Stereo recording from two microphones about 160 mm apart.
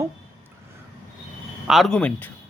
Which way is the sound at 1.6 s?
Centre (ahead or behind).